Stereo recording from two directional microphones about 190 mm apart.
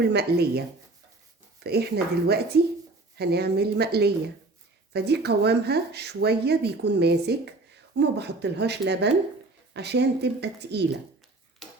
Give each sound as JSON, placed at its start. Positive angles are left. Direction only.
{"t": 0.0, "sound": "speech", "side_deg": -60}
{"t": 1.6, "sound": "speech", "side_deg": -55}